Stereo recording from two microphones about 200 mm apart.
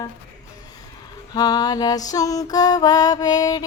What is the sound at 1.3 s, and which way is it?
Speech, 20° left (ahead or behind).